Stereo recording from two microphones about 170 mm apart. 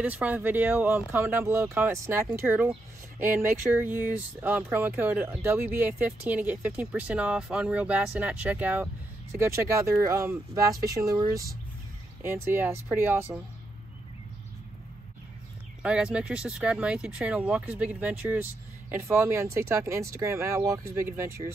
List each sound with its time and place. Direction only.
0.0 s speech: 10° right (ahead or behind)
12.2 s speech: 15° right (ahead or behind)
15.8 s speech: 5° right (ahead or behind)